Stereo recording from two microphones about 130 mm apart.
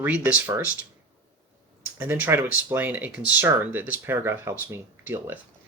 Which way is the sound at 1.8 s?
15° right (ahead or behind).